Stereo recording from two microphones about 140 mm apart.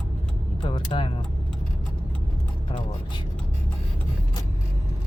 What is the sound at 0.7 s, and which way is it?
Music, 35° left (ahead or behind).